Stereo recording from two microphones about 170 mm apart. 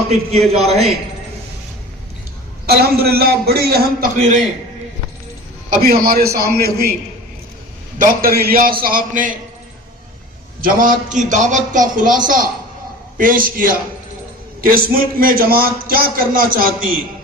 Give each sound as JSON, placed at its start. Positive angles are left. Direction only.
{"t": 0.1, "sound": "a man's voice", "side_deg": -40}
{"t": 2.6, "sound": "a man's voice", "side_deg": -65}
{"t": 4.2, "sound": "a man's voice", "side_deg": -45}
{"t": 5.7, "sound": "a man's voice", "side_deg": -60}
{"t": 7.9, "sound": "a man's voice", "side_deg": -55}
{"t": 10.6, "sound": "a man's voice", "side_deg": -55}